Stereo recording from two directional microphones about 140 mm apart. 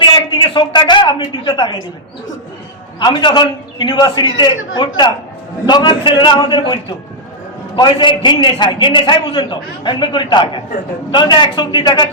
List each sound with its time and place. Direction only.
0.0 s a woman's voice: 35° left (ahead or behind)
3.0 s a man's voice: 35° left (ahead or behind)
7.8 s a man's voice: 35° left (ahead or behind)